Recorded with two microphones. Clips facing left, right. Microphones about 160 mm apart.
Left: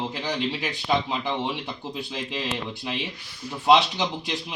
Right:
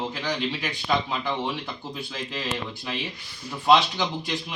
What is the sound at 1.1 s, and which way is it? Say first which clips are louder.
A man's voice: left 1 dB; 20° left (ahead or behind).